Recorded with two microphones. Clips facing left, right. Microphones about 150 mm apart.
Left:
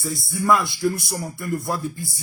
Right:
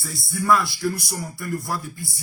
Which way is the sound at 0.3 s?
20° left (ahead or behind).